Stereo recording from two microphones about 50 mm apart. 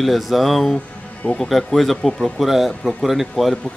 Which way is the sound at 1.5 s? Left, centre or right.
Centre.